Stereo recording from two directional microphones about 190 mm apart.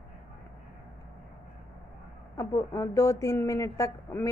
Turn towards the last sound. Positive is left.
turn(degrees=15)  # may be behind; listen again after turning